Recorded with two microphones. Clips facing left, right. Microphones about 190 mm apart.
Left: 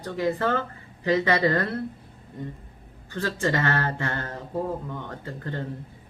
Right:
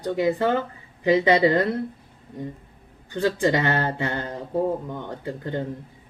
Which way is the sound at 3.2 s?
15° right (ahead or behind).